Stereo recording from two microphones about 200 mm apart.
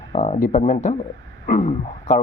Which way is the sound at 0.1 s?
40° left (ahead or behind).